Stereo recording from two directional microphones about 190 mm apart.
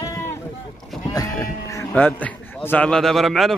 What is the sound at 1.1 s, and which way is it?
Speech, 15° left (ahead or behind).